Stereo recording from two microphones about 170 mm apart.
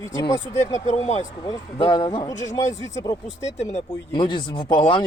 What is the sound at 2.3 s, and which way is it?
Speech, 45° left (ahead or behind).